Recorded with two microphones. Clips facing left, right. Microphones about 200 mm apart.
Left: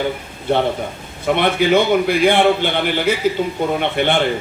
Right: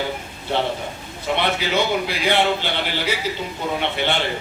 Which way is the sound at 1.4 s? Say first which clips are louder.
Left 7 dB; 55° left (ahead or behind).